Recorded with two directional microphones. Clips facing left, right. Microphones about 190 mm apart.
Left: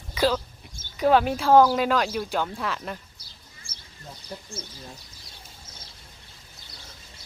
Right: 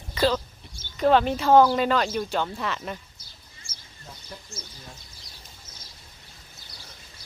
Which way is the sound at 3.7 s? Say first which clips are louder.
Left 1 dB; 60° left (ahead or behind).